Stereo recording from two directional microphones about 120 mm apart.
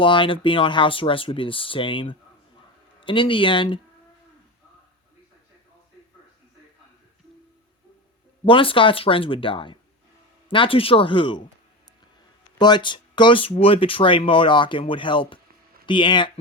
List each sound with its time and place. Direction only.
0.0 s speech: 45° left (ahead or behind)
8.4 s speech: 45° left (ahead or behind)
12.5 s speech: 40° left (ahead or behind)